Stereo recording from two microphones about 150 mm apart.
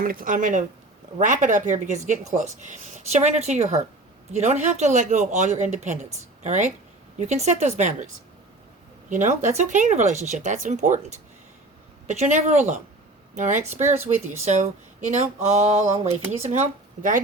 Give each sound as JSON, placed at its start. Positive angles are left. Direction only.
{"t": 0.0, "sound": "speech", "side_deg": -70}
{"t": 13.8, "sound": "speech", "side_deg": -15}
{"t": 14.3, "sound": "speech", "side_deg": -50}